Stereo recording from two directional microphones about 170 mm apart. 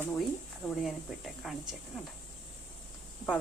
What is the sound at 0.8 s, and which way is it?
Speech, centre (ahead or behind).